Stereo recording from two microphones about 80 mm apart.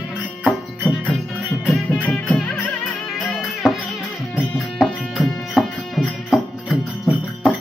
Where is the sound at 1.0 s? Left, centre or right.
Centre.